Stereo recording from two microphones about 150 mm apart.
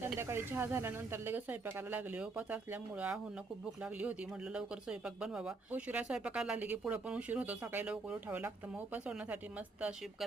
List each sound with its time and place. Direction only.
0.2 s speech: 15° right (ahead or behind)